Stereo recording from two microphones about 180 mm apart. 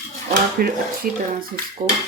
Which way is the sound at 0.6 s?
55° right (ahead or behind).